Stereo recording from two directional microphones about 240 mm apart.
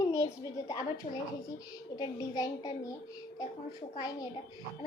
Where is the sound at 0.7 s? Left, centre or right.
Centre.